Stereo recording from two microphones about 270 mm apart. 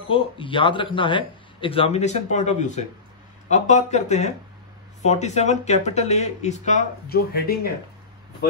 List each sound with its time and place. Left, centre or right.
0.1 s speech: centre